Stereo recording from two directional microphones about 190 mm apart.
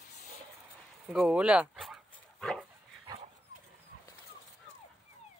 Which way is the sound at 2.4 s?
5° left (ahead or behind).